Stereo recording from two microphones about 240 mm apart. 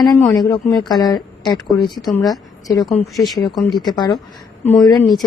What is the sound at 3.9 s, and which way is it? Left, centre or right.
Speech, centre.